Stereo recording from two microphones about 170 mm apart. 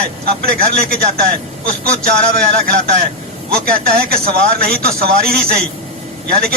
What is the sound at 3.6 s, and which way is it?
Speech, 60° right (ahead or behind).